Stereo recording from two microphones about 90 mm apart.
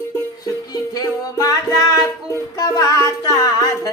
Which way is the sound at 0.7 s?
45° left (ahead or behind).